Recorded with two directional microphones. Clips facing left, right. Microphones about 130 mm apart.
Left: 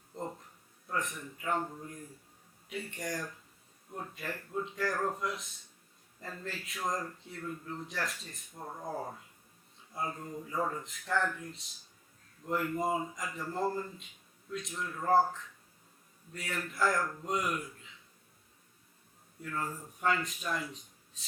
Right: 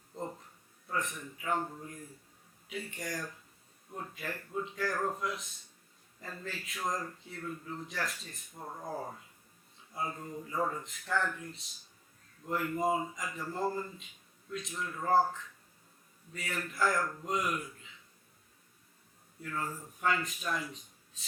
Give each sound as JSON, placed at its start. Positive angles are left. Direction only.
{"t": 0.9, "sound": "speech", "side_deg": 0}
{"t": 9.9, "sound": "speech", "side_deg": 0}
{"t": 19.4, "sound": "speech", "side_deg": 0}